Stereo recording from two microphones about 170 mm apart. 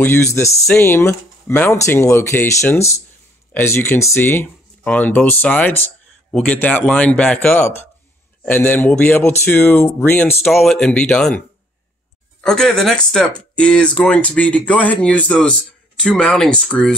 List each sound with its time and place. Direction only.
0.0 s speech: 15° left (ahead or behind)
10.3 s speech: centre (ahead or behind)